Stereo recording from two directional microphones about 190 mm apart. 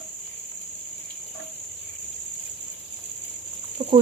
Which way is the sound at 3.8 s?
35° right (ahead or behind).